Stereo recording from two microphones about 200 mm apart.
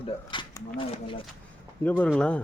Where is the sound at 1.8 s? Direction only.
5° left (ahead or behind).